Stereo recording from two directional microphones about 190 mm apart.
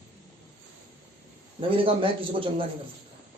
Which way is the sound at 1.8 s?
30° right (ahead or behind).